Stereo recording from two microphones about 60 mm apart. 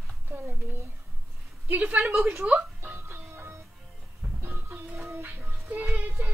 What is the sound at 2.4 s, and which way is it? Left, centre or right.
Music, right.